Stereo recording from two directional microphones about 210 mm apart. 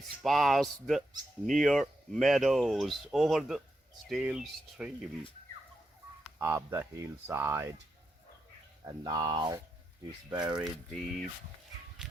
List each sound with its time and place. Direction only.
0.2 s speech: centre (ahead or behind)
6.4 s speech: 10° right (ahead or behind)
8.8 s speech: 20° right (ahead or behind)
10.6 s speech: centre (ahead or behind)